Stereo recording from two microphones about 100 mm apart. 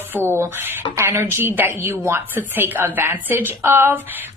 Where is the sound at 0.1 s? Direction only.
25° right (ahead or behind).